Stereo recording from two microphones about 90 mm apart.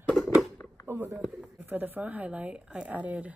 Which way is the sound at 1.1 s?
5° right (ahead or behind).